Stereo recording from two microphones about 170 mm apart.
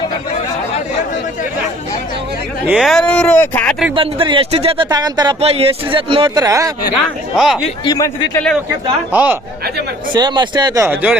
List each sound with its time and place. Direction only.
2.6 s speech: centre (ahead or behind)
3.9 s speech: 30° right (ahead or behind)
5.4 s speech: 35° right (ahead or behind); by 6.7 s 20° right (ahead or behind)
7.3 s speech: centre (ahead or behind)
7.9 s a man's voice: 20° left (ahead or behind)
9.1 s speech: 10° right (ahead or behind)
10.1 s speech: 25° right (ahead or behind)
10.8 s speech: 5° right (ahead or behind)